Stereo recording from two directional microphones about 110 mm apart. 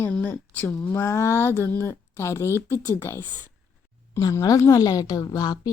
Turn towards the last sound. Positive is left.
turn(degrees=40)  # may be behind; listen again after turning